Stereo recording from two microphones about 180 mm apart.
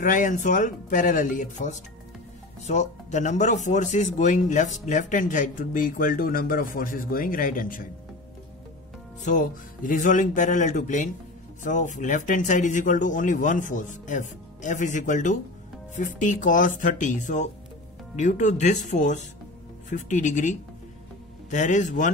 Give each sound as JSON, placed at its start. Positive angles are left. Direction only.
{"t": 0.0, "sound": "speech", "side_deg": 45}
{"t": 9.2, "sound": "speech", "side_deg": 45}